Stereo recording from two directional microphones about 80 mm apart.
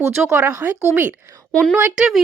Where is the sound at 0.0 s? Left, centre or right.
Right.